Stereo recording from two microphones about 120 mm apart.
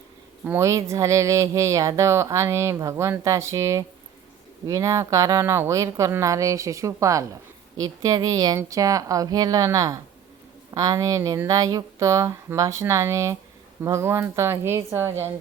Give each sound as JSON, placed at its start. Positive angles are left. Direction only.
{"t": 0.4, "sound": "speech", "side_deg": -20}